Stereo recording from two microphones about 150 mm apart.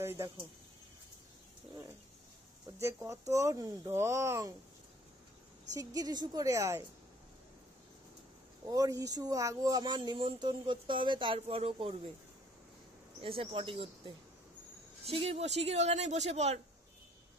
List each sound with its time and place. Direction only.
0.0 s a sound: 15° right (ahead or behind)
2.8 s speech: 20° right (ahead or behind)
5.7 s speech: 25° right (ahead or behind)
8.6 s speech: 25° right (ahead or behind); by 12.1 s 40° right (ahead or behind)
13.2 s speech: 35° right (ahead or behind)